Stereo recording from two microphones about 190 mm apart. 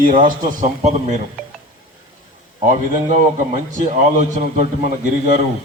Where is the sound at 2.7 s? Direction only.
40° right (ahead or behind).